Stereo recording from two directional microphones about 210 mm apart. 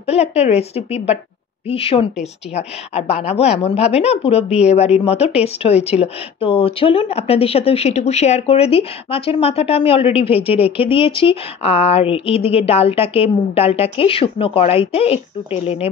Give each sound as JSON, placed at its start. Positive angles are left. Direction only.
{"t": 0.0, "sound": "a woman's voice", "side_deg": 30}